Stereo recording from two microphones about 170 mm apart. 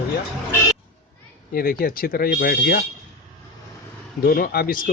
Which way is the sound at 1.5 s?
60° left (ahead or behind).